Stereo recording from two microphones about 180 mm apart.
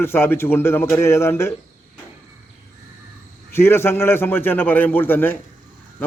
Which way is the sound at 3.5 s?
15° left (ahead or behind).